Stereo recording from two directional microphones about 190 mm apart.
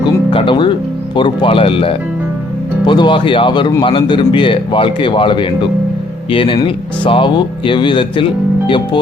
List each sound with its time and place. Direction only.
0.0 s speech: 25° left (ahead or behind)